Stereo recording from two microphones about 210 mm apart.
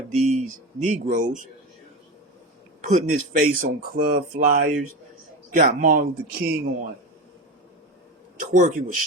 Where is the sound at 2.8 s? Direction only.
35° right (ahead or behind).